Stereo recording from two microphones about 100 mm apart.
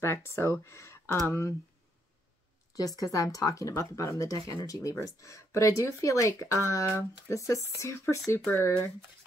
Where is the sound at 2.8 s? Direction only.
35° left (ahead or behind).